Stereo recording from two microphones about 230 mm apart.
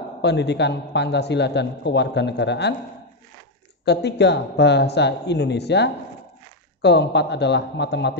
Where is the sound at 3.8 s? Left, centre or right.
Left.